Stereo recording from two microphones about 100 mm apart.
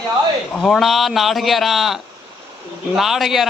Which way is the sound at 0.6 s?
Centre (ahead or behind).